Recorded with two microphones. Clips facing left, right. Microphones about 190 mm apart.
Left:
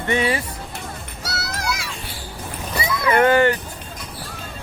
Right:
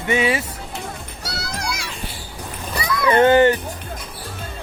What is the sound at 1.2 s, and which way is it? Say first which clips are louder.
Music: left 1 dB; 5° left (ahead or behind).